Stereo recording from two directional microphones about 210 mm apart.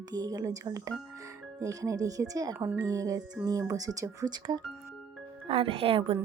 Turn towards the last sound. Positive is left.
turn(degrees=-25)  # may be behind; listen again after turning